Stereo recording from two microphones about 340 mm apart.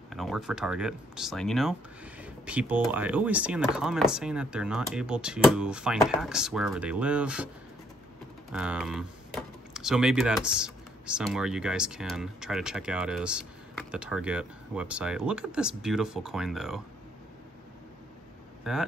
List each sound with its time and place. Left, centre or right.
0.1 s speech: centre
8.5 s speech: centre
18.6 s speech: centre